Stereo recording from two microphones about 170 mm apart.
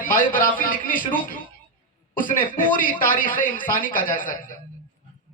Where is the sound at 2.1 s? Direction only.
55° left (ahead or behind).